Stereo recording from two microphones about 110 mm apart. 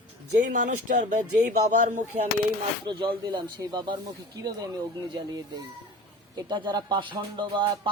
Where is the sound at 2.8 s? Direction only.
50° right (ahead or behind).